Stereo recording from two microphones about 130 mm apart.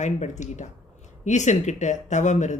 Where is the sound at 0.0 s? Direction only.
65° left (ahead or behind).